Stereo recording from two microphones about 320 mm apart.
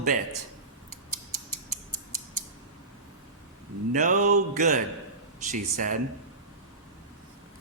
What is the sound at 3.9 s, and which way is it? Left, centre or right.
A man's voice, right.